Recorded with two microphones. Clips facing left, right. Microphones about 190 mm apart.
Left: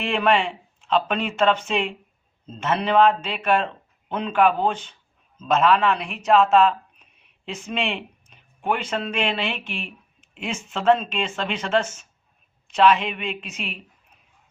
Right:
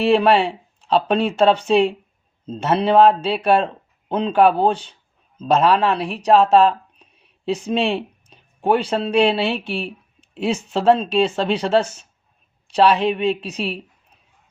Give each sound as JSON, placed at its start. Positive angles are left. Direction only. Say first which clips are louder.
{"t": 0.0, "sound": "speech", "louder": "right 6 dB", "side_deg": -35}